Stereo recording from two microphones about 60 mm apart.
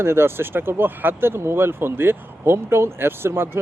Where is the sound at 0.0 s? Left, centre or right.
Right.